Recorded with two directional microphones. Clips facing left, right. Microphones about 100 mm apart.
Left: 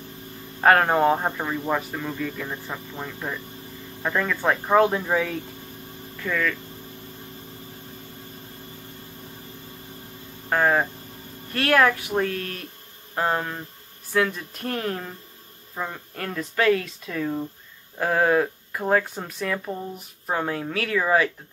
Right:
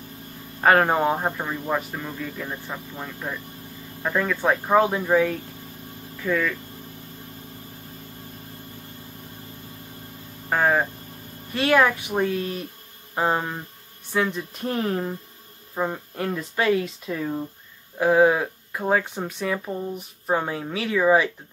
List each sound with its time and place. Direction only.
0.6 s speech: centre (ahead or behind)
10.5 s speech: 5° right (ahead or behind)